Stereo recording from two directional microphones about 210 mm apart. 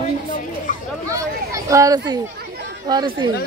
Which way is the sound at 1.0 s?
15° right (ahead or behind).